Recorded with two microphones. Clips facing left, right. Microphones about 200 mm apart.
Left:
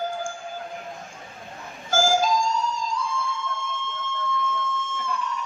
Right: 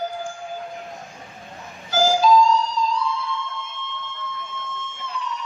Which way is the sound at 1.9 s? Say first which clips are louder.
Right 4 dB; 50° left (ahead or behind).